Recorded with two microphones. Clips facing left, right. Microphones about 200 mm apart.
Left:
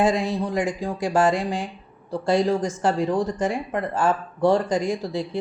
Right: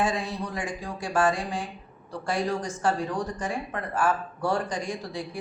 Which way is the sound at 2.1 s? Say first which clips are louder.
Left 7 dB; 25° left (ahead or behind).